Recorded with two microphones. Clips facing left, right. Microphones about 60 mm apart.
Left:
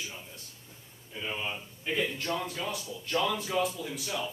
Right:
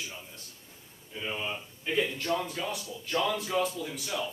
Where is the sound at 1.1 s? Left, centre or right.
Centre.